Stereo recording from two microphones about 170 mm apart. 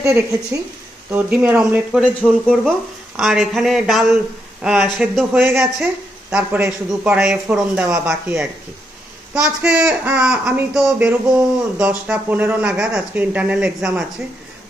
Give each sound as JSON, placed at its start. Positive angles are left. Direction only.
{"t": 0.0, "sound": "speech", "side_deg": -15}